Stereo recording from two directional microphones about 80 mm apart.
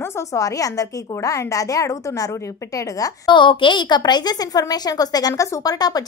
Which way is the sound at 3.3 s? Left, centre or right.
Left.